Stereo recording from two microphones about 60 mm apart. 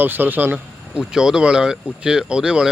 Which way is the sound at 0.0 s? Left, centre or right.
Right.